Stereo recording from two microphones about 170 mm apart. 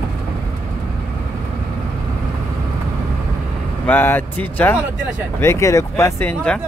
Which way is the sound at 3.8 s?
10° left (ahead or behind).